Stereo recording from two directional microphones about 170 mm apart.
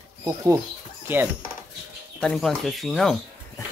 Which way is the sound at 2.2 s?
5° left (ahead or behind).